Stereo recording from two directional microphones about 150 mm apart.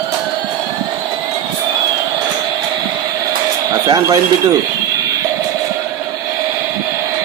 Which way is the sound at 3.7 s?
30° right (ahead or behind).